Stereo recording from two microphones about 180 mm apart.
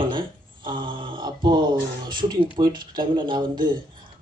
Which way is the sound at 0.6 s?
25° right (ahead or behind).